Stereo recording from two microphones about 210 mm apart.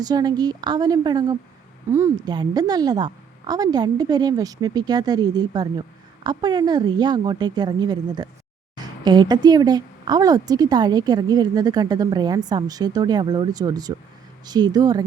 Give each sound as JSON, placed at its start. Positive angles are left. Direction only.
{"t": 0.0, "sound": "a woman's voice", "side_deg": -20}